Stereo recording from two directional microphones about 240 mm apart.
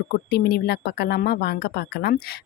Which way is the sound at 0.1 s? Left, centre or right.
Left.